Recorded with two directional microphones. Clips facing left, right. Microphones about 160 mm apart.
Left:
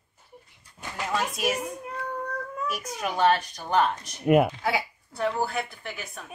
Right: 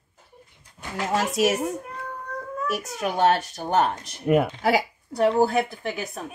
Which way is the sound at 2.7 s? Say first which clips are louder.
Right 5 dB; 40° right (ahead or behind).